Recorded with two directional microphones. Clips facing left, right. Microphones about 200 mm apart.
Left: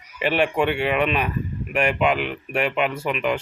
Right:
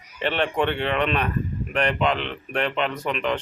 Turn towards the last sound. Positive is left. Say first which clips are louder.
# left 2 dB
turn(degrees=5)  # may be behind; listen again after turning